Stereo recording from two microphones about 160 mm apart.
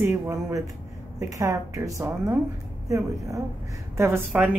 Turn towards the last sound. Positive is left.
turn(degrees=-15)  # may be behind; listen again after turning